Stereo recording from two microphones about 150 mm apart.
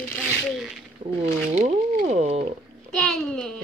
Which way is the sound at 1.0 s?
70° right (ahead or behind).